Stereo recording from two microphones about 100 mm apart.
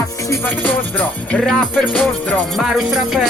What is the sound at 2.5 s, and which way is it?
Music, centre (ahead or behind).